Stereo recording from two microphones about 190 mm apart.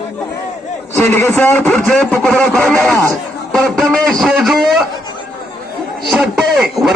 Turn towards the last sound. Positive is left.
turn(degrees=0)  # may be behind; listen again after turning